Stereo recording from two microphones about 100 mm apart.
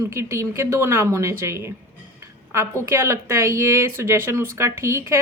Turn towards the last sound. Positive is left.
turn(degrees=-25)  # may be behind; listen again after turning